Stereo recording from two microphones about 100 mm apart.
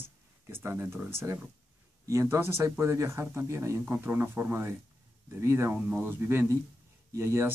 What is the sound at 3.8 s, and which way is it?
Speech, 15° right (ahead or behind).